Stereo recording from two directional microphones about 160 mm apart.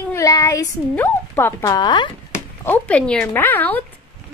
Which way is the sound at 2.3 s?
10° left (ahead or behind).